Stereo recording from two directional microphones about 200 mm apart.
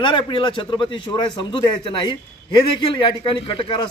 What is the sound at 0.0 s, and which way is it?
Speech, 25° left (ahead or behind).